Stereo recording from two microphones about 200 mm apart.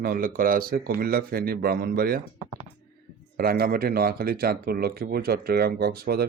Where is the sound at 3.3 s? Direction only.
50° right (ahead or behind).